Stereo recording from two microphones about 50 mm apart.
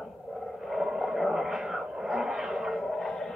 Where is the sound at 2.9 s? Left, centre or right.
Centre.